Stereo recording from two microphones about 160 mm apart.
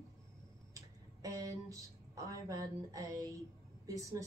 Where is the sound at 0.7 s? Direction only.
20° right (ahead or behind).